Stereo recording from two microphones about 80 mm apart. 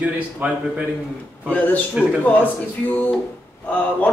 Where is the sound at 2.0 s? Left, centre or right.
Centre.